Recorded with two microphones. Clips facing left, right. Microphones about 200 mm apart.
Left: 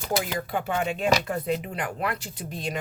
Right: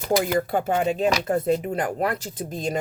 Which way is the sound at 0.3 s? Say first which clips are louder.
Right 6 dB; 45° right (ahead or behind).